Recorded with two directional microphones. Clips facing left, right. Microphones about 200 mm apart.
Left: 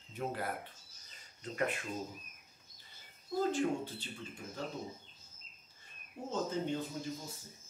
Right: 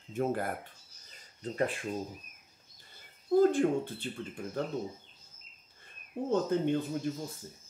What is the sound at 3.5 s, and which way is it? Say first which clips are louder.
Speech: right 6 dB; 55° right (ahead or behind).